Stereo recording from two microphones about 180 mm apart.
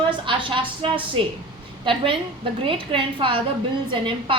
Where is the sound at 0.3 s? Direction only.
30° right (ahead or behind).